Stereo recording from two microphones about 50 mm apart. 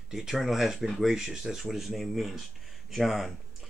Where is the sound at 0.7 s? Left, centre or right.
Centre.